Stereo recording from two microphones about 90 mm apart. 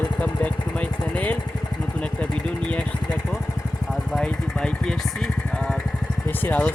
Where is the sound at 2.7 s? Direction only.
10° left (ahead or behind).